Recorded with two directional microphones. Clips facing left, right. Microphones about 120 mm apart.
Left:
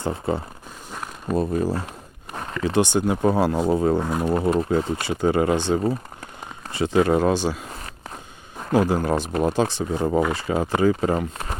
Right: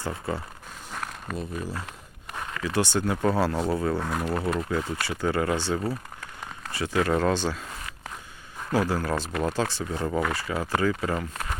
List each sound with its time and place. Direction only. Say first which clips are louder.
0.0 s speech: left 6 dB; 25° left (ahead or behind)
1.3 s speech: left 12 dB; 40° left (ahead or behind)
2.3 s a sound: left 6 dB; 35° left (ahead or behind)
2.7 s speech: left 5 dB; 15° left (ahead or behind)
7.7 s walk: left 2 dB; 35° left (ahead or behind)
8.7 s speech: left 5 dB; 20° left (ahead or behind)